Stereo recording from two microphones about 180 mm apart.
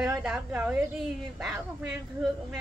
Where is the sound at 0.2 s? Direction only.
5° right (ahead or behind).